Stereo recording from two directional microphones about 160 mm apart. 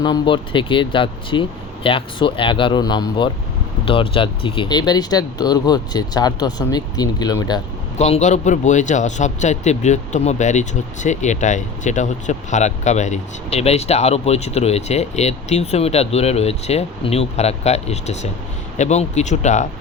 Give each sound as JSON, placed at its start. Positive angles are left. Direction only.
{"t": 0.0, "sound": "speech", "side_deg": 30}
{"t": 7.9, "sound": "a man's voice", "side_deg": 45}